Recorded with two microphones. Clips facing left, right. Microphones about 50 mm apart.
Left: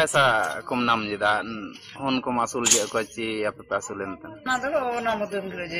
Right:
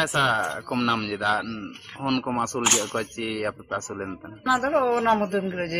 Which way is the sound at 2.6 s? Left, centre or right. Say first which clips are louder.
Right 1 dB; right.